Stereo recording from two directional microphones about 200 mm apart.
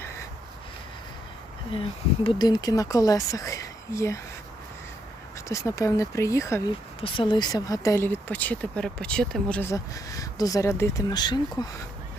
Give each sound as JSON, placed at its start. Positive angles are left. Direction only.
{"t": 1.7, "sound": "speech", "side_deg": 25}
{"t": 5.5, "sound": "speech", "side_deg": 15}